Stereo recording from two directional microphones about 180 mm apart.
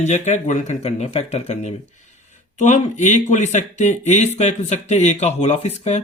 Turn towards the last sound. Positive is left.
turn(degrees=35)  # may be behind; listen again after turning